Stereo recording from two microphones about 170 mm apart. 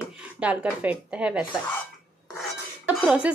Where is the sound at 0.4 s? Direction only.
10° right (ahead or behind).